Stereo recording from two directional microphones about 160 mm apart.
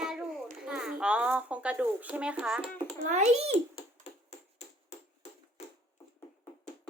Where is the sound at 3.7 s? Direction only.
40° left (ahead or behind).